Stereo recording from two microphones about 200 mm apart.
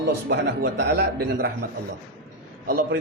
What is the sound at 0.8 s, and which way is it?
Speech, 55° right (ahead or behind).